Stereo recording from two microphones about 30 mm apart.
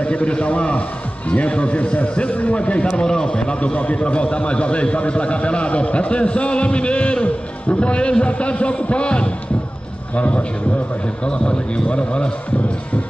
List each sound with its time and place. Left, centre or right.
0.0 s a man's voice: left
3.7 s a man's voice: left
11.2 s a man's voice: left